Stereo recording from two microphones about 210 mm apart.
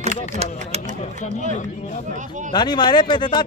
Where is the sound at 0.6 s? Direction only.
35° right (ahead or behind).